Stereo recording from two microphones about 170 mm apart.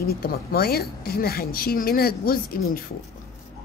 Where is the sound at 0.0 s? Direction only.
65° left (ahead or behind).